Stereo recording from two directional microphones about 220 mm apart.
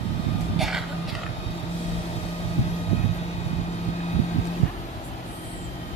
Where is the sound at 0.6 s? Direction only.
Centre (ahead or behind).